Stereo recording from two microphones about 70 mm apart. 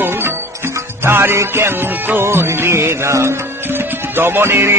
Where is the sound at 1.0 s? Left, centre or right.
Right.